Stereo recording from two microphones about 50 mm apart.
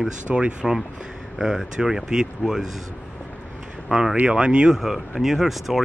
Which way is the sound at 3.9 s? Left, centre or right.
Centre.